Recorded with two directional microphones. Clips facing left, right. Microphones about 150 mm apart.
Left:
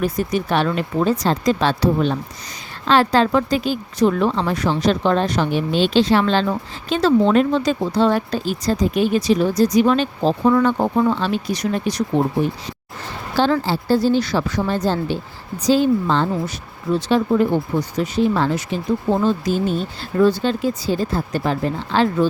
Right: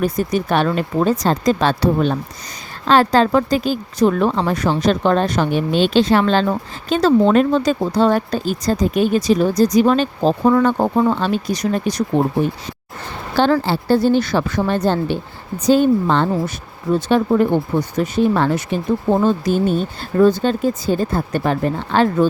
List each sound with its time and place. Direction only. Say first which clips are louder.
0.0 s speech: right 2 dB; 45° right (ahead or behind)
13.3 s speech: right 2 dB; 60° right (ahead or behind)